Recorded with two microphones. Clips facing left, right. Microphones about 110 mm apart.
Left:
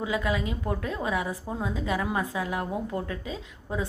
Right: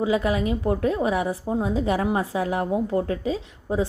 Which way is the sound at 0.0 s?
25° right (ahead or behind).